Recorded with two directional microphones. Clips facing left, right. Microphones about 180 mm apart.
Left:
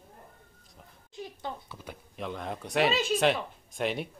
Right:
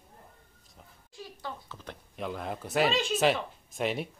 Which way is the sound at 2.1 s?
Centre (ahead or behind).